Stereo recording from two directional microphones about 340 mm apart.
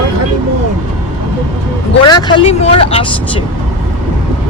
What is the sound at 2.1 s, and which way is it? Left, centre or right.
Speech, centre.